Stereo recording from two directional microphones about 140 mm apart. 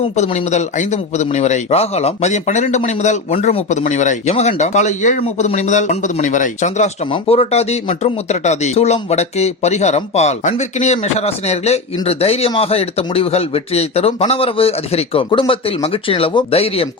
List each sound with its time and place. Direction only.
0.0 s speech: 45° left (ahead or behind)
7.1 s speech: 45° left (ahead or behind)